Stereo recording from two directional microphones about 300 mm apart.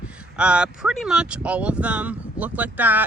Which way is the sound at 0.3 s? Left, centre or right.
Centre.